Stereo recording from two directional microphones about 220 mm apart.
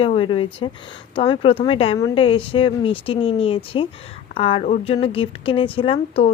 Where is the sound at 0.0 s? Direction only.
25° left (ahead or behind).